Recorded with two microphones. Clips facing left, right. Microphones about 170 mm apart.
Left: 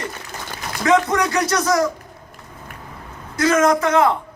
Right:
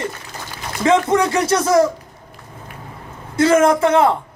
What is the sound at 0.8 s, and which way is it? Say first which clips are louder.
Speech: right 2 dB; 25° right (ahead or behind).